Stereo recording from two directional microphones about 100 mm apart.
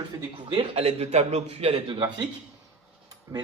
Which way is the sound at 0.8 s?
90° right.